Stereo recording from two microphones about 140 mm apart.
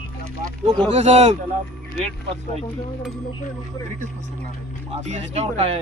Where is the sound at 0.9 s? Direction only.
50° right (ahead or behind).